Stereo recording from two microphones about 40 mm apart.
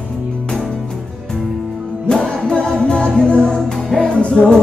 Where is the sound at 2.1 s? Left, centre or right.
Centre.